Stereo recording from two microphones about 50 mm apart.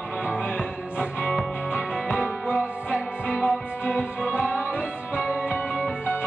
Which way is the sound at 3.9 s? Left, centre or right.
Right.